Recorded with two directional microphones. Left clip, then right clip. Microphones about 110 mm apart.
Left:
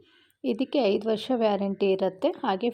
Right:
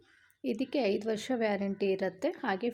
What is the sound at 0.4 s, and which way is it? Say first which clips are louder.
A woman's voice: left 6 dB; 15° left (ahead or behind).